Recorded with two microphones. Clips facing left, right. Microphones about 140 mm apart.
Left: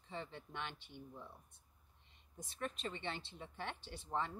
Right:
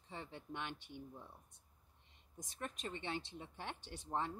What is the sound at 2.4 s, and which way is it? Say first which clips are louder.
Speech: left 2 dB; 15° right (ahead or behind).